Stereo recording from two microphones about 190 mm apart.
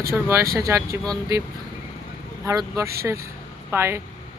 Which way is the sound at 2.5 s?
15° right (ahead or behind).